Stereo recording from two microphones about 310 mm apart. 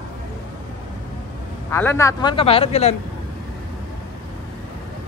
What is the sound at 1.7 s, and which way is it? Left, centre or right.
A man's voice, centre.